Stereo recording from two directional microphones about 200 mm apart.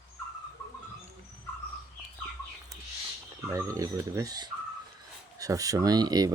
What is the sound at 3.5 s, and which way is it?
Speech, 15° right (ahead or behind).